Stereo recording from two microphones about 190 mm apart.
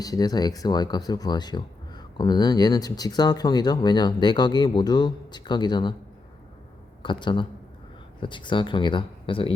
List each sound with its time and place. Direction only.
0.0 s speech: 20° left (ahead or behind)
7.0 s speech: 25° left (ahead or behind)